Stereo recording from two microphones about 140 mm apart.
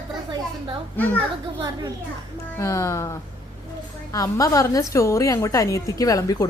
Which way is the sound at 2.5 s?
20° left (ahead or behind).